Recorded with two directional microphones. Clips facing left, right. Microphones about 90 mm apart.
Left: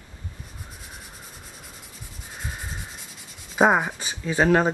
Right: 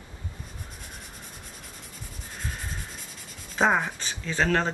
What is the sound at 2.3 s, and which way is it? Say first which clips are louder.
Rub: left 1 dB; 5° left (ahead or behind).